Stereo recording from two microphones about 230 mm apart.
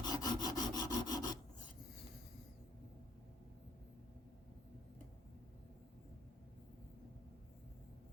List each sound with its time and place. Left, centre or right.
0.0 s filing: centre